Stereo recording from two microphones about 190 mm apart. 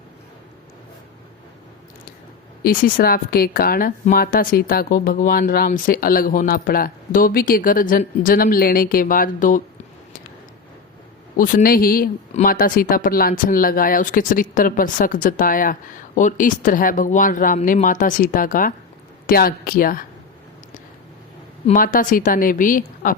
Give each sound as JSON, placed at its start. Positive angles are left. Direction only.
{"t": 2.6, "sound": "speech", "side_deg": 50}
{"t": 11.3, "sound": "speech", "side_deg": 45}
{"t": 21.7, "sound": "speech", "side_deg": 45}